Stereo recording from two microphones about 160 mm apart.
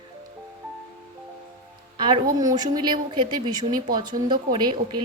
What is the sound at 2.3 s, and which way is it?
Speech, 25° right (ahead or behind).